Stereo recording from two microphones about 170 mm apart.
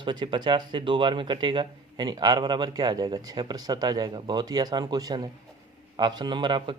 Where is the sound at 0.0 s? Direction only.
25° right (ahead or behind).